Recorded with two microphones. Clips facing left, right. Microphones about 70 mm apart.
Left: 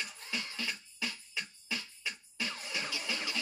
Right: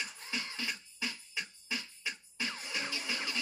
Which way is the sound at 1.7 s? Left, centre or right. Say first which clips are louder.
Even; right.